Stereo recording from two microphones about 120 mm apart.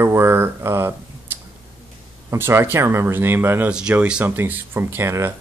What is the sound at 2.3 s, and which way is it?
Speech, 20° right (ahead or behind).